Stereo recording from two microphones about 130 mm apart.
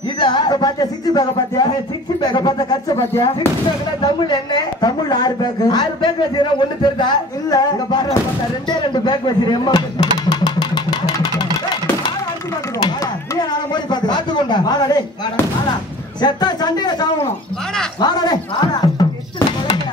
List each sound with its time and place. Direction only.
0.2 s a woman's voice: 35° left (ahead or behind)
4.0 s a woman's voice: 35° left (ahead or behind)
10.3 s engine: 30° left (ahead or behind)
13.4 s a woman's voice: 35° left (ahead or behind)
16.2 s a woman's voice: 35° left (ahead or behind)